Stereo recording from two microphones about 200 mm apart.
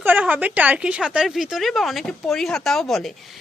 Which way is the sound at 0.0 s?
10° right (ahead or behind).